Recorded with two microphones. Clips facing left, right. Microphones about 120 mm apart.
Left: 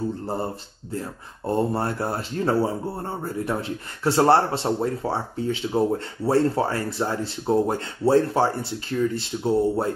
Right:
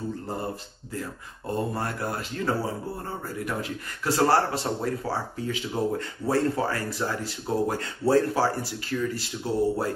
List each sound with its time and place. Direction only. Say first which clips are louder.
1.7 s speech: left 5 dB; 30° left (ahead or behind)